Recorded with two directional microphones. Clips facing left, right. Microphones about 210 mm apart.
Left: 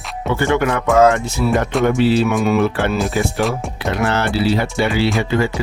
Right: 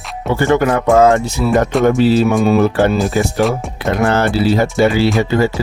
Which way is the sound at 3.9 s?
45° right (ahead or behind).